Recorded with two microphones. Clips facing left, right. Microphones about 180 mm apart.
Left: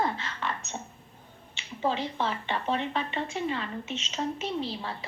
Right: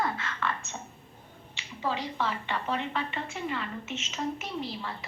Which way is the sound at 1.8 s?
25° left (ahead or behind).